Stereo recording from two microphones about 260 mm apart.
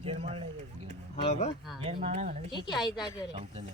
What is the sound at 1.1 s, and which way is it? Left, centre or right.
Speech, left.